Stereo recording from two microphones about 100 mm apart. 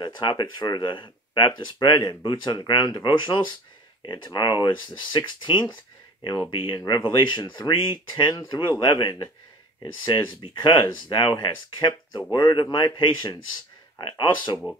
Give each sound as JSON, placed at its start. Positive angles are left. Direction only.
{"t": 0.0, "sound": "speech", "side_deg": 50}